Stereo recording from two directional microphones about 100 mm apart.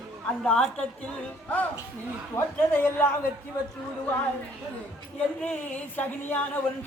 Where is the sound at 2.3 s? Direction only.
15° left (ahead or behind).